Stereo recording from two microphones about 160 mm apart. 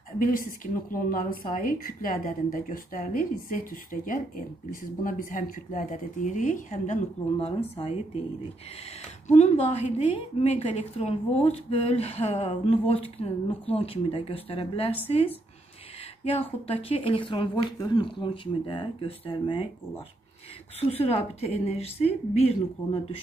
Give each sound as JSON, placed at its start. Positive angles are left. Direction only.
{"t": 0.2, "sound": "a woman's voice", "side_deg": 60}
{"t": 9.3, "sound": "a woman's voice", "side_deg": 45}
{"t": 20.9, "sound": "a woman's voice", "side_deg": 40}